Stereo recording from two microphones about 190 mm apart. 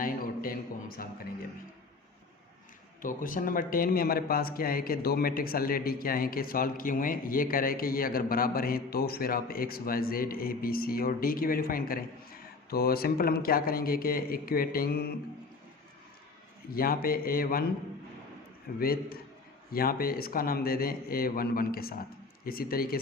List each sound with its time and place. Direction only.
0.0 s a sound: 50° left (ahead or behind)
3.0 s speech: 45° left (ahead or behind)
16.7 s speech: 50° left (ahead or behind)
18.8 s speech: 50° left (ahead or behind)